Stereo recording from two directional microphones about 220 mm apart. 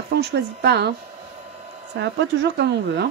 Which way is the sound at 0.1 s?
50° right (ahead or behind).